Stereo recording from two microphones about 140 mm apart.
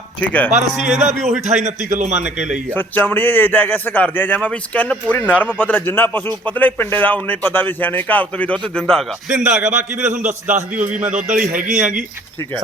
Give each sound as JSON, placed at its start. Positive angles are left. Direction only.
{"t": 0.2, "sound": "speech", "side_deg": 10}
{"t": 0.7, "sound": "speech", "side_deg": -5}
{"t": 1.6, "sound": "a man's voice", "side_deg": -60}
{"t": 2.2, "sound": "speech", "side_deg": -5}
{"t": 2.7, "sound": "speech", "side_deg": 15}
{"t": 9.3, "sound": "speech", "side_deg": -5}
{"t": 9.6, "sound": "a man's voice", "side_deg": -60}